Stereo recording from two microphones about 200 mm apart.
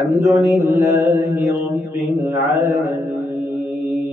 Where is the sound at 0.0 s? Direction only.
15° right (ahead or behind).